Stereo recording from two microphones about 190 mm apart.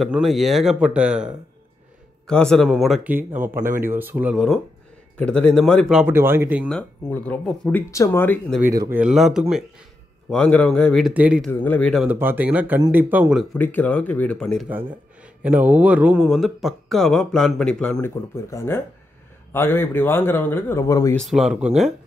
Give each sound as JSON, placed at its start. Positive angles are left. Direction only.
{"t": 0.0, "sound": "speech", "side_deg": 0}
{"t": 5.1, "sound": "speech", "side_deg": 5}
{"t": 6.7, "sound": "speech", "side_deg": 5}
{"t": 8.5, "sound": "speech", "side_deg": -15}
{"t": 11.6, "sound": "speech", "side_deg": 5}
{"t": 14.7, "sound": "speech", "side_deg": -10}
{"t": 21.2, "sound": "speech", "side_deg": 0}